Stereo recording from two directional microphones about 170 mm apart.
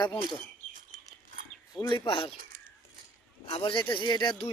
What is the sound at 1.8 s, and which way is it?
Speech, 25° left (ahead or behind).